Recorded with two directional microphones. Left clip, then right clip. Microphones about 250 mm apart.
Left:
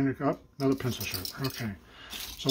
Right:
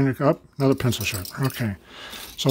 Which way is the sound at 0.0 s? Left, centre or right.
Right.